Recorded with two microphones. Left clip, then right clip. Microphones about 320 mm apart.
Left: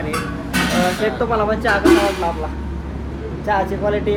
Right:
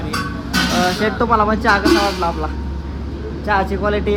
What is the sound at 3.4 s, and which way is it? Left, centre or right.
Speech, right.